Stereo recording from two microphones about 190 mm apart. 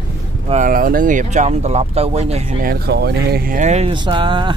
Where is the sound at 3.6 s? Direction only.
35° right (ahead or behind).